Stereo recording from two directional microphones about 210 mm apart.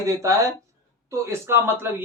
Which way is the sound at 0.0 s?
15° right (ahead or behind).